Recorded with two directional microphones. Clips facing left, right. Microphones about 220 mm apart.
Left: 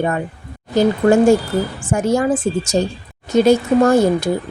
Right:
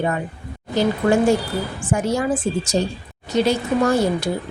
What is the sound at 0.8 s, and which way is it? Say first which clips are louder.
Speech: left 5 dB; 45° left (ahead or behind).